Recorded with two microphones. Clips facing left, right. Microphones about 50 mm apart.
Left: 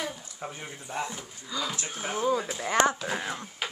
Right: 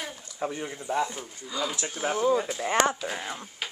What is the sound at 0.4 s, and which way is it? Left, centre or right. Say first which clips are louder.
Speech: right 10 dB; right.